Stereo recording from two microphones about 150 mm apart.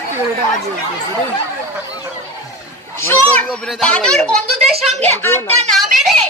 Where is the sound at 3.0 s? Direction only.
15° left (ahead or behind).